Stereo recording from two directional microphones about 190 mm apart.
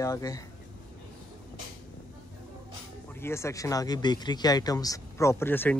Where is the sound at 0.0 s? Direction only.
15° left (ahead or behind).